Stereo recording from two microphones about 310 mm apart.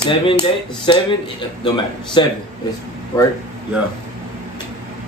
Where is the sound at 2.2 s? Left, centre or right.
Centre.